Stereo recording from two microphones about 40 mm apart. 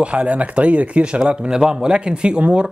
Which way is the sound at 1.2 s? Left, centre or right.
Centre.